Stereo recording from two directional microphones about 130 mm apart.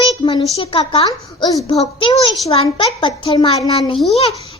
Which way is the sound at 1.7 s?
45° left (ahead or behind).